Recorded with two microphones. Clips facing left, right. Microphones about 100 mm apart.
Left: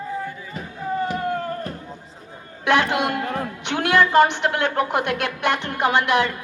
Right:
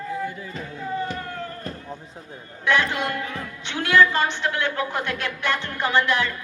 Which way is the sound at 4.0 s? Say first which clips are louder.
Left 3 dB; 60° left (ahead or behind).